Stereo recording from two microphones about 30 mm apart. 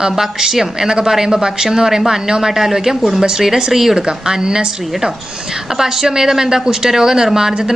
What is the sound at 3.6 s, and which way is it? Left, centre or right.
Speech, right.